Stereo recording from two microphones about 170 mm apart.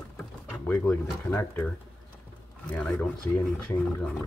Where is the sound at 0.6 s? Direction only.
10° left (ahead or behind).